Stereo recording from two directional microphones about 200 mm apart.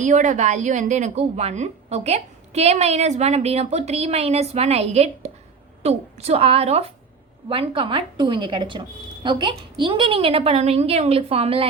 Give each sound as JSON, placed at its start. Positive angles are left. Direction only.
{"t": 0.0, "sound": "a woman's voice", "side_deg": -35}